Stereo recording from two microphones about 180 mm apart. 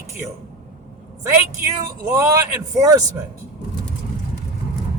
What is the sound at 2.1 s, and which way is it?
Speech, 15° right (ahead or behind).